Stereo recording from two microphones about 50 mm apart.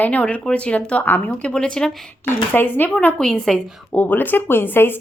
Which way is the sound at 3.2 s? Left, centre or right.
Centre.